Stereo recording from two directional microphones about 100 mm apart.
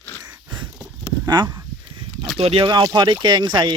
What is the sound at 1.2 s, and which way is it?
Speech, 45° right (ahead or behind).